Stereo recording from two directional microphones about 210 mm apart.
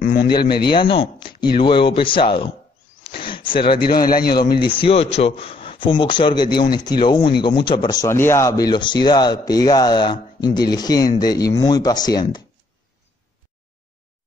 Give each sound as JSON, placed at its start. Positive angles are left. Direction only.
{"t": 0.0, "sound": "a sound", "side_deg": 40}
{"t": 0.7, "sound": "speech", "side_deg": 25}
{"t": 3.8, "sound": "a man's voice", "side_deg": 45}
{"t": 4.6, "sound": "speech", "side_deg": 25}